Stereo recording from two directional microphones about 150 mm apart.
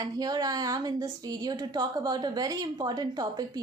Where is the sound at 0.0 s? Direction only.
25° right (ahead or behind).